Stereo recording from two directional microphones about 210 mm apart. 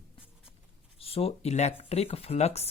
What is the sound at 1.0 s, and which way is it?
Speech, 30° left (ahead or behind).